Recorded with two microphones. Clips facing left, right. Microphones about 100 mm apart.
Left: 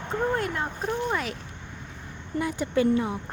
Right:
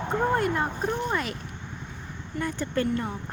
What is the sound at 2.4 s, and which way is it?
Speech, 10° left (ahead or behind).